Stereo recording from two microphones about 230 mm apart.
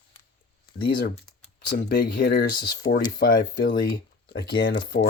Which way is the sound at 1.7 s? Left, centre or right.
Left.